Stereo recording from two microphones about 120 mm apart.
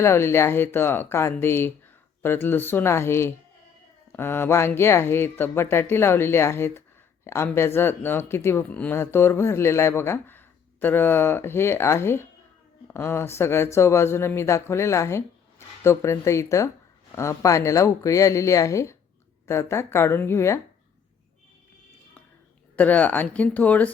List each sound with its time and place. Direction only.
0.0 s speech: 20° left (ahead or behind)
22.7 s speech: 15° left (ahead or behind)